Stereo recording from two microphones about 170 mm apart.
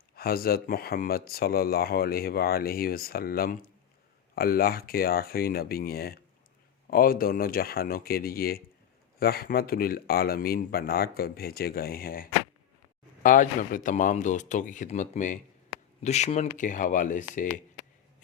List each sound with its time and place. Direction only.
0.2 s speech: 60° left (ahead or behind)